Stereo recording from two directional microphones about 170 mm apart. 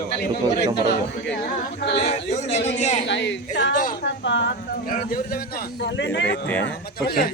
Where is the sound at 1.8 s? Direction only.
75° left (ahead or behind).